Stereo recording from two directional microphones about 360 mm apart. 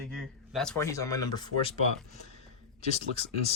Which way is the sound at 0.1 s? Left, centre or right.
Centre.